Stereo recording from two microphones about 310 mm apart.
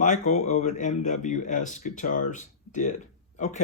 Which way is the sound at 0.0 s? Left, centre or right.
Left.